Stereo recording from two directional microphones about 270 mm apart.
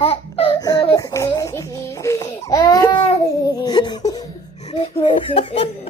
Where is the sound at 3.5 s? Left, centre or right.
Centre.